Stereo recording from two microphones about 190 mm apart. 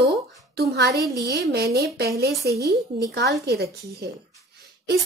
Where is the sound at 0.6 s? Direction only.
60° right (ahead or behind).